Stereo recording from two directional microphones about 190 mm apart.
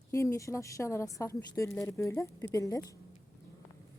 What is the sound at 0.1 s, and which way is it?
A woman's voice, 15° left (ahead or behind).